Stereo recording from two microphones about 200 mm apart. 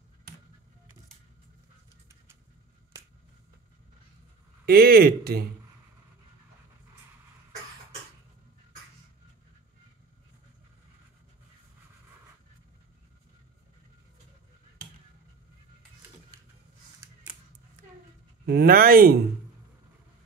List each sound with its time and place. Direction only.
4.6 s speech: 50° right (ahead or behind)
18.4 s speech: 55° right (ahead or behind)